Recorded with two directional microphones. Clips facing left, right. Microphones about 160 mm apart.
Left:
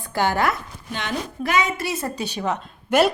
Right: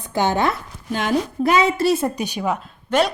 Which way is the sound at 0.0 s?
20° right (ahead or behind).